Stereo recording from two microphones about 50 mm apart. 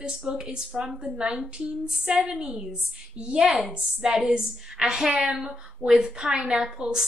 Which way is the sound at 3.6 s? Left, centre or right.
Centre.